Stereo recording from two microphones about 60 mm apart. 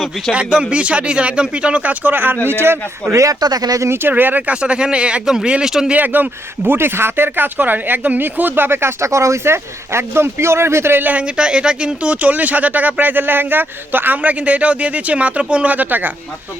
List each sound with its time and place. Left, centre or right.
0.3 s speech: centre; by 3.2 s right
3.2 s speech: right
3.8 s speech: right
4.1 s speech: right; by 5.9 s centre
5.9 s speech: right
6.7 s speech: right
11.0 s speech: right